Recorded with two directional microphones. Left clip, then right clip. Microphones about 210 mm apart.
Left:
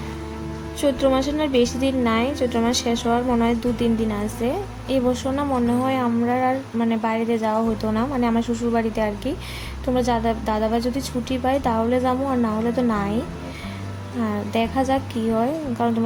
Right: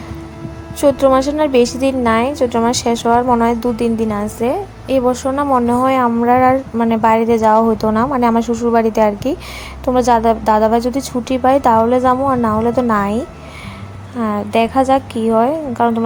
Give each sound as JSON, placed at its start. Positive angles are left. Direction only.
{"t": 0.8, "sound": "a woman's voice", "side_deg": -25}
{"t": 14.2, "sound": "a woman's voice", "side_deg": -20}